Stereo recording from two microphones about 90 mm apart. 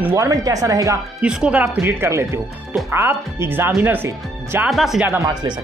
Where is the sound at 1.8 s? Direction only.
25° right (ahead or behind).